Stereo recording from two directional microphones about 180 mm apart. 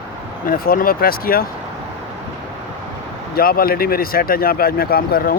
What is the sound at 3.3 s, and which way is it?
Speech, 55° left (ahead or behind).